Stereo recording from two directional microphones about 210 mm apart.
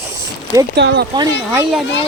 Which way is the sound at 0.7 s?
55° right (ahead or behind).